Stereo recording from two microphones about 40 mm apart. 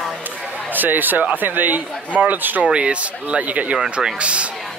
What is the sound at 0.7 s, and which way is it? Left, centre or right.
Speech, right.